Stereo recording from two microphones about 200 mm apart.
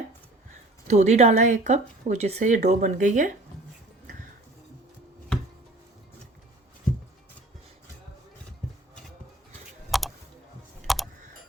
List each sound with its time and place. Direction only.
0.9 s speech: 35° right (ahead or behind)
9.9 s typing: centre (ahead or behind)
10.8 s a sound: centre (ahead or behind)